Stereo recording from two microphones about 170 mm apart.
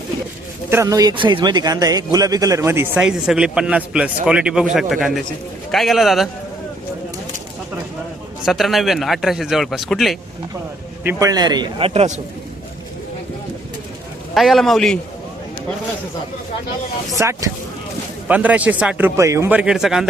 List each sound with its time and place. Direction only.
0.7 s a man's voice: 20° right (ahead or behind); by 6.2 s centre (ahead or behind)
8.4 s a man's voice: centre (ahead or behind)
11.0 s a man's voice: 15° right (ahead or behind); by 12.2 s 40° right (ahead or behind)
14.3 s a man's voice: centre (ahead or behind)
17.2 s a man's voice: 20° right (ahead or behind); by 20.1 s 5° right (ahead or behind)